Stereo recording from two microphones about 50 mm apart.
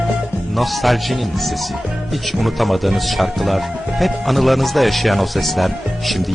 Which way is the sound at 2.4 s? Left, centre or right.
Centre.